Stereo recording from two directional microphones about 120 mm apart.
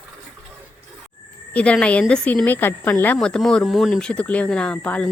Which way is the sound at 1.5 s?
10° left (ahead or behind).